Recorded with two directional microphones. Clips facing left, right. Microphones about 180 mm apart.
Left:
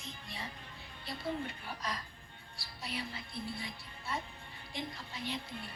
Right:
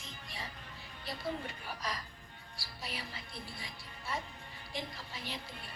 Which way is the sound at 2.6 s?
25° left (ahead or behind).